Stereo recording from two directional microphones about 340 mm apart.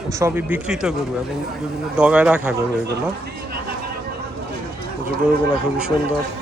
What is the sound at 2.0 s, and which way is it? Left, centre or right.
Speech, centre.